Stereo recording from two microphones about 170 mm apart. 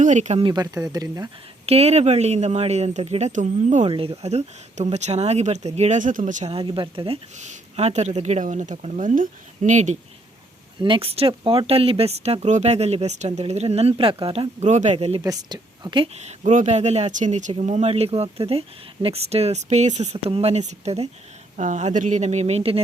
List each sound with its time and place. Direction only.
0.0 s speech: 45° right (ahead or behind)
0.4 s a woman's voice: 25° right (ahead or behind)
1.6 s speech: 35° right (ahead or behind)
10.8 s speech: 30° right (ahead or behind)
15.2 s a woman's voice: 25° right (ahead or behind)
16.1 s speech: 40° right (ahead or behind)